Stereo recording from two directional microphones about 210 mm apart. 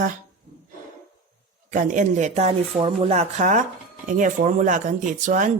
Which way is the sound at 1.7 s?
40° right (ahead or behind).